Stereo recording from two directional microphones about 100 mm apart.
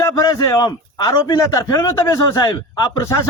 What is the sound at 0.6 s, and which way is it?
Speech, 50° left (ahead or behind).